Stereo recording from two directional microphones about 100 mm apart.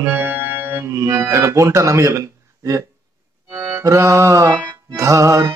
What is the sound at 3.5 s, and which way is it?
Music, 20° right (ahead or behind).